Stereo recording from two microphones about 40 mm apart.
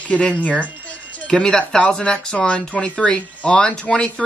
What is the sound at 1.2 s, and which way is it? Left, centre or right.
Speech, left.